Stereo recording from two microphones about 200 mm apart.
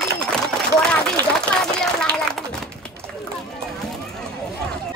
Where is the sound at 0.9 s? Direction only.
5° left (ahead or behind).